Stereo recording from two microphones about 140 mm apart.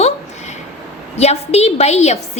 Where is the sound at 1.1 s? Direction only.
50° left (ahead or behind).